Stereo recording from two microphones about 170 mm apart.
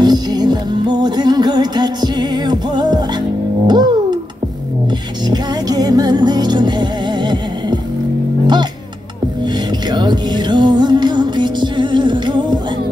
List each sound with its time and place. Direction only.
0.0 s music: 25° right (ahead or behind)
5.2 s music: 25° right (ahead or behind)
9.4 s music: 25° right (ahead or behind)